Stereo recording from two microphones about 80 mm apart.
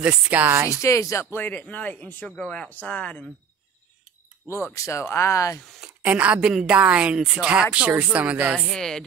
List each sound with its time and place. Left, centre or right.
0.0 s speech: centre
0.7 s speech: left
1.3 s speech: left
4.7 s speech: left
6.0 s a woman's voice: centre
8.5 s speech: centre